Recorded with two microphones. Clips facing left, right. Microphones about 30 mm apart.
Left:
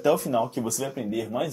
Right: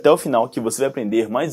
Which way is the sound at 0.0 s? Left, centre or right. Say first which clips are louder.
Right 8 dB; right.